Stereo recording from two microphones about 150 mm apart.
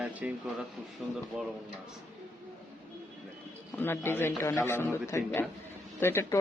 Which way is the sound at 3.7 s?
15° left (ahead or behind).